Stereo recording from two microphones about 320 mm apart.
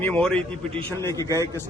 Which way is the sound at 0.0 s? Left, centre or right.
Centre.